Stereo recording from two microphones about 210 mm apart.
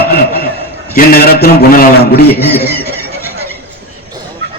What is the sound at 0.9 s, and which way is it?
A man's voice, 45° left (ahead or behind).